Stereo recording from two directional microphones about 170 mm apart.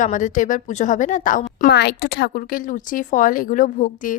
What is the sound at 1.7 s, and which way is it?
A woman's voice, 80° left.